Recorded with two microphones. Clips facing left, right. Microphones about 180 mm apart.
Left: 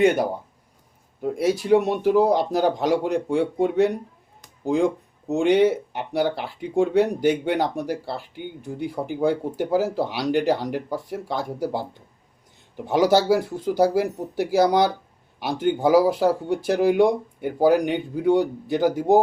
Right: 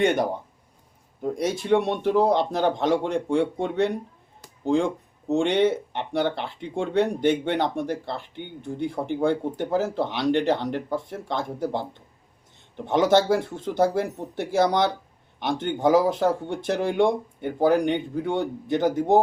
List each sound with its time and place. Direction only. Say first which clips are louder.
0.0 s speech: left 3 dB; 5° left (ahead or behind)